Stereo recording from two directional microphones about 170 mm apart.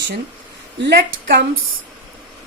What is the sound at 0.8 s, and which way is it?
Speech, 75° right (ahead or behind).